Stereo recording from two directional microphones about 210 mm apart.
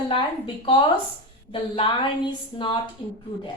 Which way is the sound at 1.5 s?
25° left (ahead or behind).